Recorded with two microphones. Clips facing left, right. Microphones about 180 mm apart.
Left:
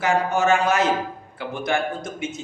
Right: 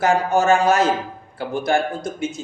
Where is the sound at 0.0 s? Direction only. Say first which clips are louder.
Right 3 dB; 35° right (ahead or behind).